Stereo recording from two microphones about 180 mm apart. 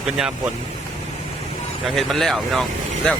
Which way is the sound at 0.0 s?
5° right (ahead or behind).